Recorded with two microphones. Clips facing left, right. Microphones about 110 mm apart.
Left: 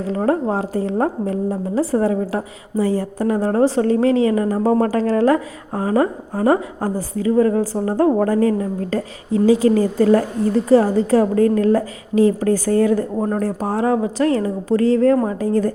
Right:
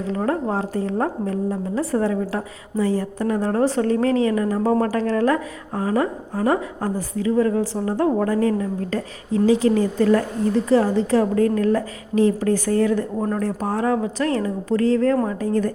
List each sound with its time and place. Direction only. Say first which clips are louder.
0.1 s a woman's voice: left 4 dB; 35° left (ahead or behind)